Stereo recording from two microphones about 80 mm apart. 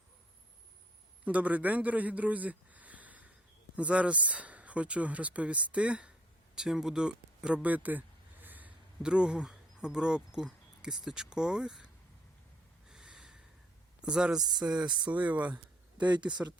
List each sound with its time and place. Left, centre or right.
1.2 s a man's voice: centre
9.0 s speech: centre
12.9 s snort: centre
14.0 s speech: centre
14.3 s speech: right
15.2 s speech: centre
15.5 s a sound: right
16.3 s speech: right